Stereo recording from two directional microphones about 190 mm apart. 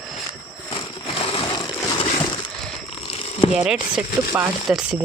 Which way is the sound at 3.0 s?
30° left (ahead or behind).